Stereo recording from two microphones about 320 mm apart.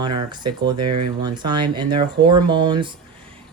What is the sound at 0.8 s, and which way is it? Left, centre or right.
Speech, right.